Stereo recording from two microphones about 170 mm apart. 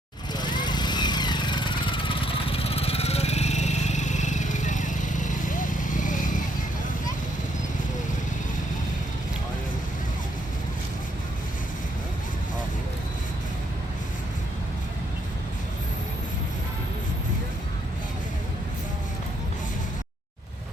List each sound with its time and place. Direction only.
0.3 s vehicle: 25° left (ahead or behind); by 6.4 s 50° left (ahead or behind)